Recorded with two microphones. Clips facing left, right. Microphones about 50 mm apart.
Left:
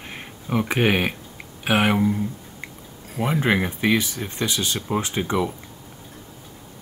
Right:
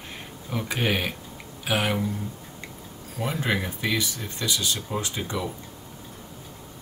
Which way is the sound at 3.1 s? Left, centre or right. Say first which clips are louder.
Left 6 dB; left.